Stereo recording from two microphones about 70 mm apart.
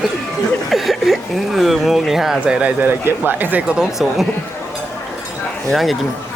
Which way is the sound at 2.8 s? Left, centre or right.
Right.